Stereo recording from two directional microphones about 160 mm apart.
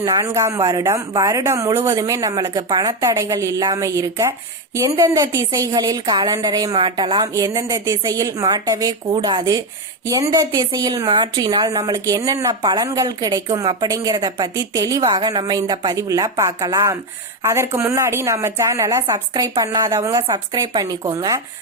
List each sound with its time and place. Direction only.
0.0 s speech: 20° right (ahead or behind)